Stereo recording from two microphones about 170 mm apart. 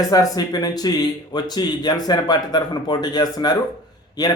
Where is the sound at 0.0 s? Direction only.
20° left (ahead or behind).